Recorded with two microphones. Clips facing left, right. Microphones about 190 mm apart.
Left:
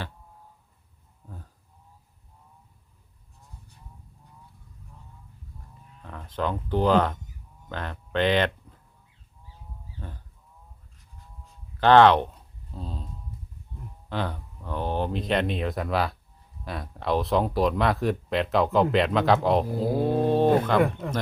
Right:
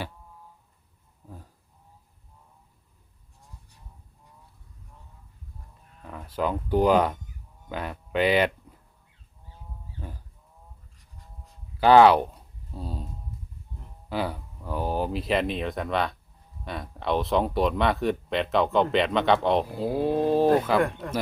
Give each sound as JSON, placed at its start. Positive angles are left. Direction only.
{"t": 6.0, "sound": "speech", "side_deg": -5}
{"t": 11.8, "sound": "a sound", "side_deg": -10}
{"t": 14.1, "sound": "speech", "side_deg": -10}